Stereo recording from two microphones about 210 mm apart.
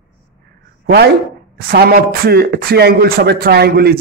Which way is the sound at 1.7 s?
45° right (ahead or behind).